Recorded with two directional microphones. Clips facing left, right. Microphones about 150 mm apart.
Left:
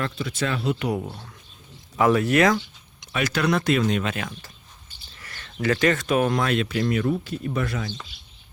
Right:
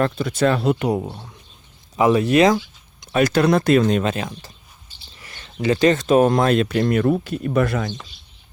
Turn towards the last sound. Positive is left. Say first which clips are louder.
# right 7 dB
turn(degrees=-60)  # may be behind; listen again after turning